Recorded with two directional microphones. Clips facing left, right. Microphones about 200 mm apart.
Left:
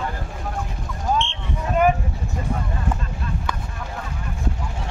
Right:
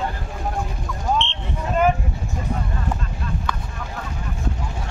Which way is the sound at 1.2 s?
10° left (ahead or behind).